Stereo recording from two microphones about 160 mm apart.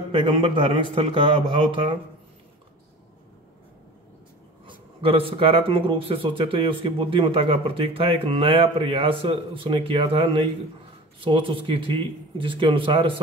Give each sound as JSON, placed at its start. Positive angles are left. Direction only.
{"t": 0.1, "sound": "speech", "side_deg": -30}
{"t": 4.6, "sound": "speech", "side_deg": -35}